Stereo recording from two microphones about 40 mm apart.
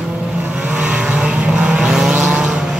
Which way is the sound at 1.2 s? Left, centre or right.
Right.